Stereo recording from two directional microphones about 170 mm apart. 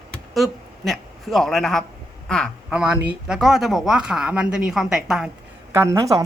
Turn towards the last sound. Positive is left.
turn(degrees=-20)  # may be behind; listen again after turning